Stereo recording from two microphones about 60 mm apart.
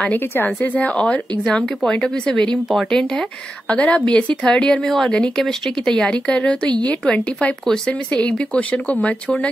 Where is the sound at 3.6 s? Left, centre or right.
Left.